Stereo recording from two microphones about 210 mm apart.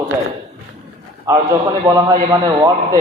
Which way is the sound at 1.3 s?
15° right (ahead or behind).